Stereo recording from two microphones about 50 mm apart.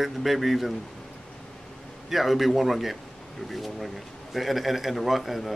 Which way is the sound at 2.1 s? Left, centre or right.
Centre.